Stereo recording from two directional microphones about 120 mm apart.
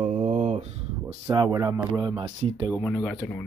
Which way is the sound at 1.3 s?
35° right (ahead or behind).